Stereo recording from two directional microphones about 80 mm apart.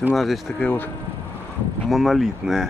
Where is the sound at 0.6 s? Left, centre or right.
Centre.